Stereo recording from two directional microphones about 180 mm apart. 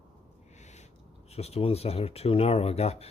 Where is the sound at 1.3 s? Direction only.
35° left (ahead or behind).